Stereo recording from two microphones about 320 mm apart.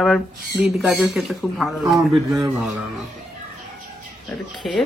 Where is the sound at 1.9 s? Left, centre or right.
Centre.